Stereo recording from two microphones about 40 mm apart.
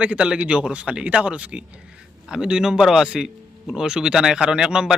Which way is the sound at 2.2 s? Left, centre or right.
Centre.